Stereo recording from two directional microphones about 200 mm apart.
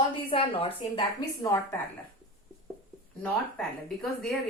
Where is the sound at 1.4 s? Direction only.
10° left (ahead or behind).